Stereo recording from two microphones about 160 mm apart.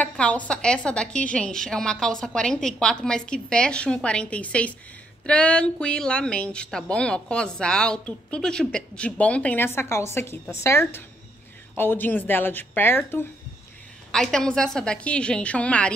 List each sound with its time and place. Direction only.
0.0 s a woman's voice: 10° left (ahead or behind)
14.1 s a woman's voice: 5° left (ahead or behind)